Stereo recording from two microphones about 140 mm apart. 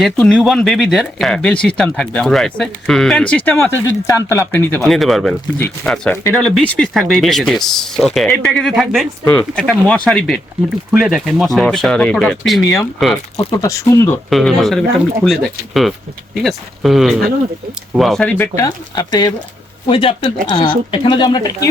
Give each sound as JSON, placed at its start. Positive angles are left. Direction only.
{"t": 0.0, "sound": "speech", "side_deg": 5}
{"t": 4.9, "sound": "speech", "side_deg": 0}
{"t": 5.5, "sound": "speech", "side_deg": 15}
{"t": 9.2, "sound": "speech", "side_deg": 10}
{"t": 13.6, "sound": "speech", "side_deg": 20}
{"t": 14.3, "sound": "speech", "side_deg": 0}
{"t": 18.5, "sound": "speech", "side_deg": 25}
{"t": 19.9, "sound": "speech", "side_deg": 40}